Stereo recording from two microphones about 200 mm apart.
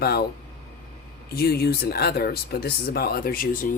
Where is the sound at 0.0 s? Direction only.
50° left (ahead or behind).